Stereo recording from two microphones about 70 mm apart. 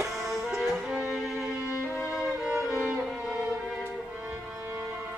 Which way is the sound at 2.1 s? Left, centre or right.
Centre.